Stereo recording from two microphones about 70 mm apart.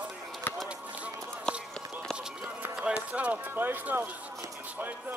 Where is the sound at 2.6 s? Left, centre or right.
Centre.